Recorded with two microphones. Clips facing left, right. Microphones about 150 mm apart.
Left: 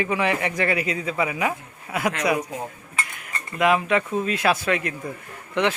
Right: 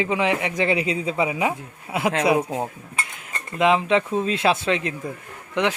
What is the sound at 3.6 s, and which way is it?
Speech, 20° right (ahead or behind).